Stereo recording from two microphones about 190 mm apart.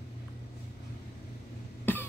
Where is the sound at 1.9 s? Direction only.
10° left (ahead or behind).